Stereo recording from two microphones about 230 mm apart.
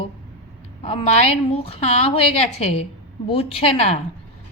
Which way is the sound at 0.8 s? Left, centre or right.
Left.